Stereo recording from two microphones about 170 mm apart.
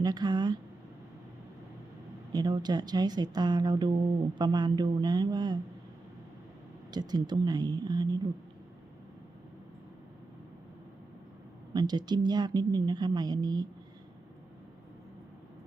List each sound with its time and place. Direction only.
0.0 s speech: 25° right (ahead or behind)
2.3 s speech: 25° right (ahead or behind)
6.9 s speech: 25° right (ahead or behind)
11.7 s speech: 25° right (ahead or behind)